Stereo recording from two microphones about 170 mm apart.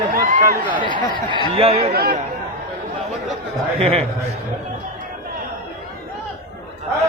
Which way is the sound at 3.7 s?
35° right (ahead or behind).